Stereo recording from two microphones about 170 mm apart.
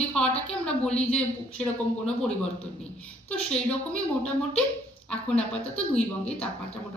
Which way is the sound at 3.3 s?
5° left (ahead or behind).